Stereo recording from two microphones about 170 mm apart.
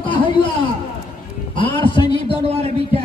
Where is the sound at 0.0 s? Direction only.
30° left (ahead or behind).